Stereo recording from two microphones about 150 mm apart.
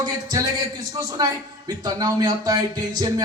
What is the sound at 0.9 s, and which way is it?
A man's voice, 25° right (ahead or behind).